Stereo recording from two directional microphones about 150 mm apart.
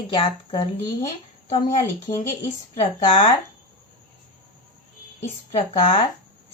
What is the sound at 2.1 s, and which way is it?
Speech, 70° left (ahead or behind).